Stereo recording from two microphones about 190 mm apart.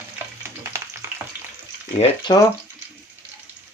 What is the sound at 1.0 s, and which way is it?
Frying, 10° right (ahead or behind).